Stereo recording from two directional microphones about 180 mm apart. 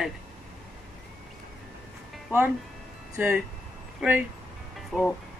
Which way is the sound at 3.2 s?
10° right (ahead or behind).